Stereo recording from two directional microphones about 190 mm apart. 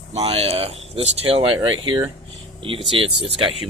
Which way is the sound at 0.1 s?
30° right (ahead or behind).